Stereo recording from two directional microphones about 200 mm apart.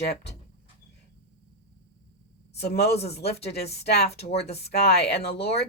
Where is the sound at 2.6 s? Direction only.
55° left (ahead or behind).